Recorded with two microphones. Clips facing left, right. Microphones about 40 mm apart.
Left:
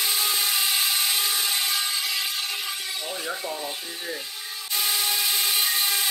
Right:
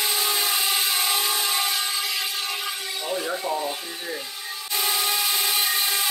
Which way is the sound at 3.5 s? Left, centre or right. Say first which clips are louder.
Right 5 dB; right.